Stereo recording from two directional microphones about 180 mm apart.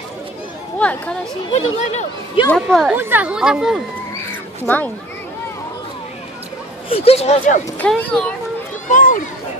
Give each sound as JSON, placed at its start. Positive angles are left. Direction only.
{"t": 0.7, "sound": "speech", "side_deg": 5}
{"t": 1.5, "sound": "speech", "side_deg": 40}
{"t": 2.5, "sound": "speech", "side_deg": 0}
{"t": 4.2, "sound": "cat", "side_deg": 10}
{"t": 6.9, "sound": "speech", "side_deg": 35}
{"t": 7.8, "sound": "speech", "side_deg": 5}
{"t": 8.9, "sound": "speech", "side_deg": 45}